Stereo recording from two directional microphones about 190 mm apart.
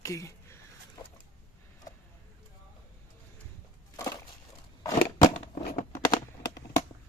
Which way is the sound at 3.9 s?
15° left (ahead or behind).